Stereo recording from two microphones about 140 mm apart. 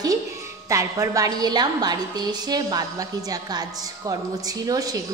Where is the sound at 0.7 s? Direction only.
25° right (ahead or behind).